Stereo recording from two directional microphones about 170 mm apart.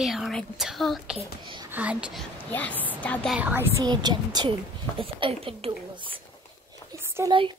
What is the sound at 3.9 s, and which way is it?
A child's voice, 25° right (ahead or behind).